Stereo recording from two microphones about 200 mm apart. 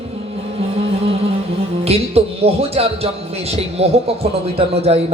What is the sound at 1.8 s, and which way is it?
Speech, 30° right (ahead or behind).